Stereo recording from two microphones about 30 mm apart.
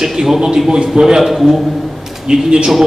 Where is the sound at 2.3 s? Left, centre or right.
Right.